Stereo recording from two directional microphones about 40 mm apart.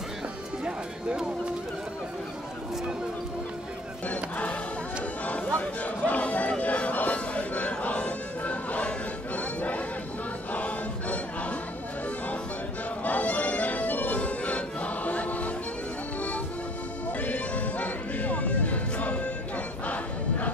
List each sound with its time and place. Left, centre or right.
0.7 s music: right
4.1 s music: left
5.2 s a sound: left
10.5 s music: left
13.0 s music: left